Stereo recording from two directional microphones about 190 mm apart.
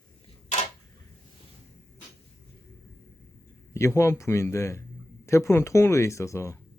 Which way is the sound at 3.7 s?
15° left (ahead or behind).